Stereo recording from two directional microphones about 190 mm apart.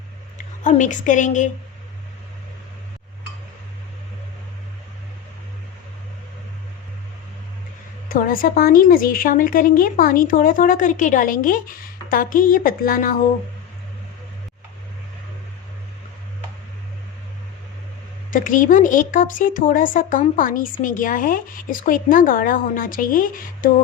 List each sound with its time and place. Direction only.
0.3 s a woman's voice: 40° left (ahead or behind)
8.1 s speech: 45° left (ahead or behind)
18.3 s speech: 45° left (ahead or behind)